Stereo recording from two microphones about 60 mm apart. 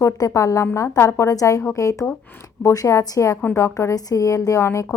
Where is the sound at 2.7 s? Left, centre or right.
Left.